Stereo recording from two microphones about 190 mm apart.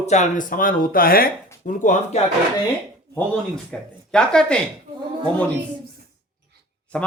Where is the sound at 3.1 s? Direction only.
5° left (ahead or behind).